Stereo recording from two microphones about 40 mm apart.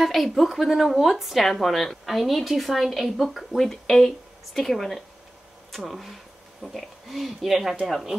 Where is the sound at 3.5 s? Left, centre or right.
Centre.